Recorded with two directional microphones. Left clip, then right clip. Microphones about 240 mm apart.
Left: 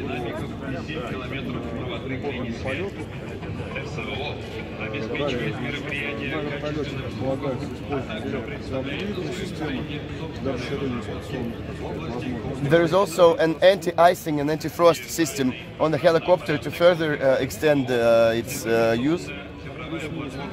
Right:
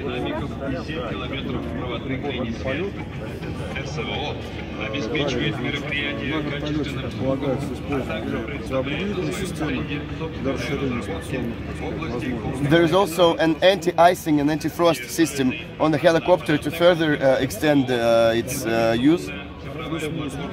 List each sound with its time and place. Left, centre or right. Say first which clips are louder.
5.3 s speech: right 3 dB; centre
12.6 s speech: right 1 dB; left